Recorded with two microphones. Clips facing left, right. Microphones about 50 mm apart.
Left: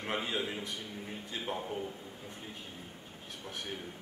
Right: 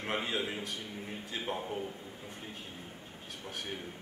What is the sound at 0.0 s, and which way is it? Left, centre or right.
A man's voice, centre.